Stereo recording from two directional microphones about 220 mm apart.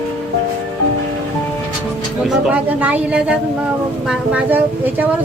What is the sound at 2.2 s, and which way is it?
A woman's voice, 5° right (ahead or behind).